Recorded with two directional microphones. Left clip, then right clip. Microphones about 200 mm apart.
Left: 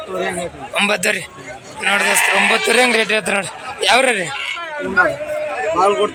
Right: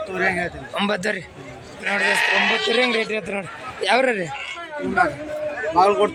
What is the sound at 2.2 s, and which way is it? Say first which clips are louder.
Speech: left 4 dB; 35° right (ahead or behind).